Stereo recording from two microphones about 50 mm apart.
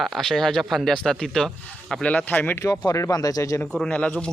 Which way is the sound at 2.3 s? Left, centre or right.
Left.